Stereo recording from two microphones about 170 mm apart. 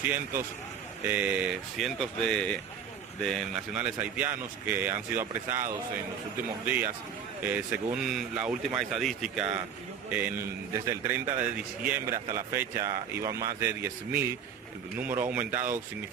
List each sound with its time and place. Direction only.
1.0 s a man's voice: 10° right (ahead or behind)